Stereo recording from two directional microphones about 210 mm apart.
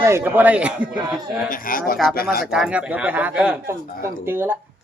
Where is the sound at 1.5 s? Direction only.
40° left (ahead or behind).